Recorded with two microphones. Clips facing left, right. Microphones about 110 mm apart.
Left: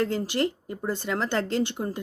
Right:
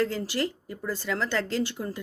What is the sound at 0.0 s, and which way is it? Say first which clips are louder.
Speech: left 2 dB; 20° left (ahead or behind).